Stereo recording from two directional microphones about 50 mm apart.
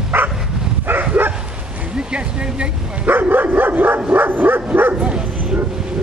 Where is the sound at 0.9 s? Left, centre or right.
Right.